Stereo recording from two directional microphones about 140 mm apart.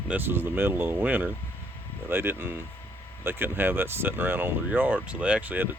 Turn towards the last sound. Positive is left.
turn(degrees=-10)  # may be behind; listen again after turning